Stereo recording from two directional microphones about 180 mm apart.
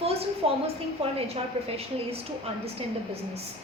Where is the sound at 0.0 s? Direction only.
35° right (ahead or behind).